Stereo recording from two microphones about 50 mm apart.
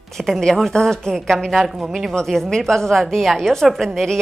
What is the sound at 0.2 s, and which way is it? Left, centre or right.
A woman's voice, centre.